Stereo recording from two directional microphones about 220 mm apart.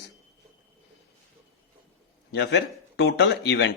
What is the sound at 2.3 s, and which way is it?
A man's voice, 50° left (ahead or behind).